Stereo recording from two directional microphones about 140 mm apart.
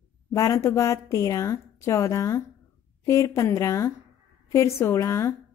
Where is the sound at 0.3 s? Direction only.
25° left (ahead or behind).